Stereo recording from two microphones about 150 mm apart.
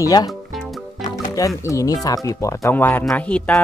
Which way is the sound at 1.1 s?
25° left (ahead or behind).